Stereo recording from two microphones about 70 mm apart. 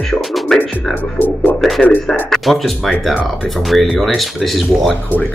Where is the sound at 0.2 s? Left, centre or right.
Centre.